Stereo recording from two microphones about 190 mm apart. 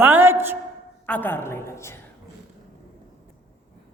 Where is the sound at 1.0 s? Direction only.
10° left (ahead or behind).